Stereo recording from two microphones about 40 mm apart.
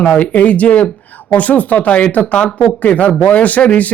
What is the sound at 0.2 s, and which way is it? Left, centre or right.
A man's voice, left.